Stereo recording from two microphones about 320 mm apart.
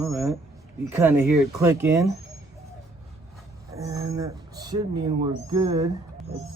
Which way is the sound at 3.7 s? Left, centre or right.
Centre.